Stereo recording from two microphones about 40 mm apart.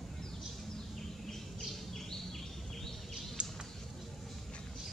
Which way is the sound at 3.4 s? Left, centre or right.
Right.